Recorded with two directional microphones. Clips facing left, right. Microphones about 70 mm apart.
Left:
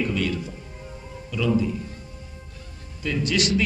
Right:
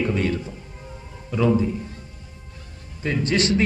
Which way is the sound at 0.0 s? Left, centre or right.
Right.